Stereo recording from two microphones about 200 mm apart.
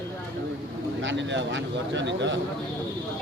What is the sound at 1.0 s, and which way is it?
Speech, 65° right (ahead or behind).